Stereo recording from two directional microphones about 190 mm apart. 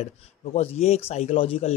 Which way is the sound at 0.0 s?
35° left (ahead or behind).